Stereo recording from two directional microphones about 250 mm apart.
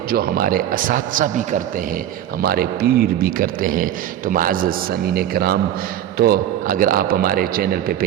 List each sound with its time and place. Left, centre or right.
0.1 s a man's voice: right